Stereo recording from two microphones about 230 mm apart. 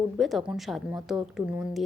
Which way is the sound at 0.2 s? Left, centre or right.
Centre.